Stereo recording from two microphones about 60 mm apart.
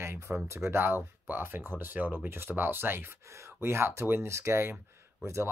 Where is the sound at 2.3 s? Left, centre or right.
Right.